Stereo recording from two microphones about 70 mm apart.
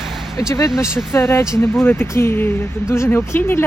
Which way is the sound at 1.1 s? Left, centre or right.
Left.